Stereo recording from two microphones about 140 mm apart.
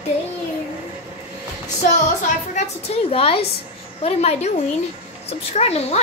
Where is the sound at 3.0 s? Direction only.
45° left (ahead or behind).